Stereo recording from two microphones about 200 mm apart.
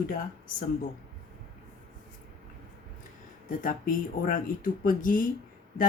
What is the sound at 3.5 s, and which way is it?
Speech, 45° left (ahead or behind).